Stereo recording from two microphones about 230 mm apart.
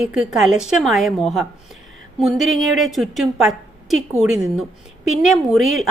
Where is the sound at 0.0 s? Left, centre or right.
Centre.